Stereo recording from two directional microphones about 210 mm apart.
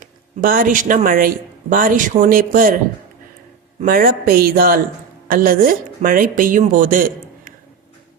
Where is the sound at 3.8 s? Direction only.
45° right (ahead or behind).